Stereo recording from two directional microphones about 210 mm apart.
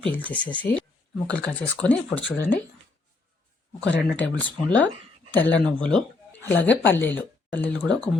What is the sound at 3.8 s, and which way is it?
Speech, 60° left (ahead or behind).